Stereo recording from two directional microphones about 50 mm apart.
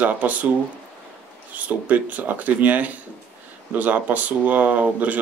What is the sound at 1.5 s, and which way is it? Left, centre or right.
Speech, right.